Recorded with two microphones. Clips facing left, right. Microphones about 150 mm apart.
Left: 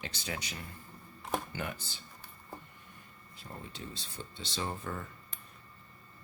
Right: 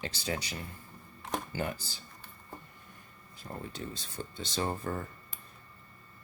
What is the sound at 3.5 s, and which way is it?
Speech, 40° right (ahead or behind).